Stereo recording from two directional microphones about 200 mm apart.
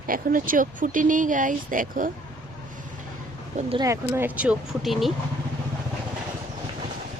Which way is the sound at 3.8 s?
15° right (ahead or behind).